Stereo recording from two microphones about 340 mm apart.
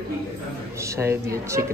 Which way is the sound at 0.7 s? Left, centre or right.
Centre.